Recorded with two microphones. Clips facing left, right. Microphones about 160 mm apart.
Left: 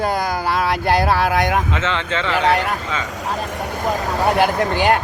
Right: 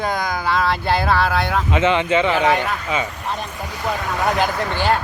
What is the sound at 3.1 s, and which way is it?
Speech, 90° left.